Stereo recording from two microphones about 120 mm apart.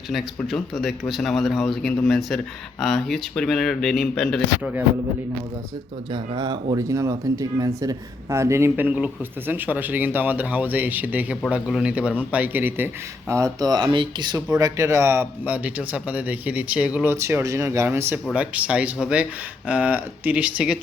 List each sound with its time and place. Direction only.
0.3 s speech: centre (ahead or behind)
6.1 s speech: 40° right (ahead or behind)
6.8 s a man's voice: 25° right (ahead or behind); by 20.7 s 10° right (ahead or behind)